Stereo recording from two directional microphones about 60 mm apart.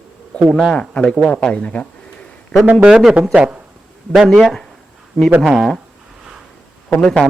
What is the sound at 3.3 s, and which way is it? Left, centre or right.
Speech, right.